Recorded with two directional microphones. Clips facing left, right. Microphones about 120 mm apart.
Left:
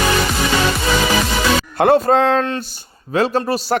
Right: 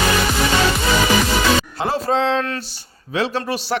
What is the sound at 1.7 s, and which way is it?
A man's voice, 55° left (ahead or behind).